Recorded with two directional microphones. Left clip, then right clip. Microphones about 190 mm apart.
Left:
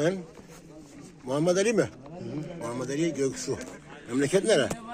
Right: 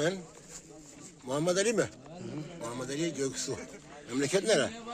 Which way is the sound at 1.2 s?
Centre (ahead or behind).